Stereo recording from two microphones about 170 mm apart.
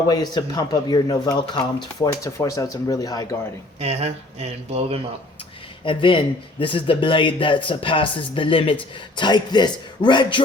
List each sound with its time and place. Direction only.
0.1 s speech: 25° left (ahead or behind)
3.8 s speech: 35° right (ahead or behind)
5.8 s speech: 30° left (ahead or behind)